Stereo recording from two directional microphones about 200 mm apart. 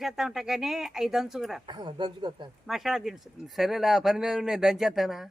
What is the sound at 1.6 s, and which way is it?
Speech, 25° right (ahead or behind).